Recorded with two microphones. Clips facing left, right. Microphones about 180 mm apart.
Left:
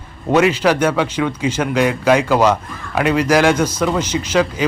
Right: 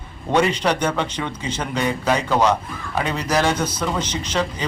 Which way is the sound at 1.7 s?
90° left.